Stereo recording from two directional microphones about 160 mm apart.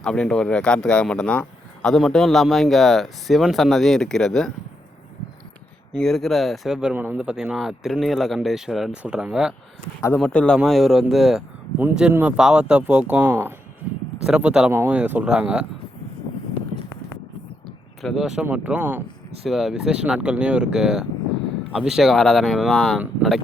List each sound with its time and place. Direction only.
0.0 s speech: 5° left (ahead or behind)
5.9 s speech: 5° left (ahead or behind)
10.2 s speech: 5° left (ahead or behind)
18.0 s speech: centre (ahead or behind)
19.5 s speech: centre (ahead or behind)